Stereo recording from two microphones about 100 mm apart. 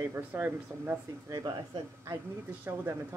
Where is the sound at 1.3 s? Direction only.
45° right (ahead or behind).